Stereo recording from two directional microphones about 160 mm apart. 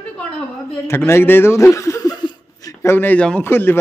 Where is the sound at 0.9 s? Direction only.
15° left (ahead or behind).